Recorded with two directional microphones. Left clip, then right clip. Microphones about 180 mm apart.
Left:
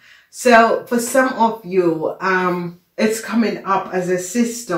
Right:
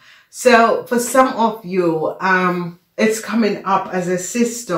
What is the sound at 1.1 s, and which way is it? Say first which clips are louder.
Speech: right 1 dB; 40° right (ahead or behind).